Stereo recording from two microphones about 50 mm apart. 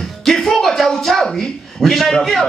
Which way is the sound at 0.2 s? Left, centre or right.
Centre.